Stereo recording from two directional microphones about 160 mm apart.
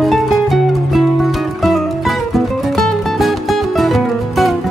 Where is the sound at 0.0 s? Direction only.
Centre (ahead or behind).